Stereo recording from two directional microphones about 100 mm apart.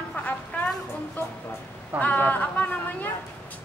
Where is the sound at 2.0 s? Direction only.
15° left (ahead or behind).